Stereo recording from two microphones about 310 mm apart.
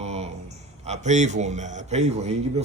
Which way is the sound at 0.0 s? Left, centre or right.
Right.